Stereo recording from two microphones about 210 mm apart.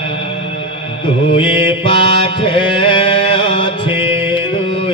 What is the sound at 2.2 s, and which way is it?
Music, 25° left (ahead or behind).